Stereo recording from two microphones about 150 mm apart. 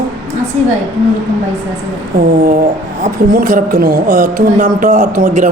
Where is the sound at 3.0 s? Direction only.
70° right (ahead or behind).